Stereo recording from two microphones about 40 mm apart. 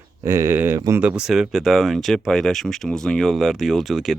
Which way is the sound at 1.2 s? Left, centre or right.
Centre.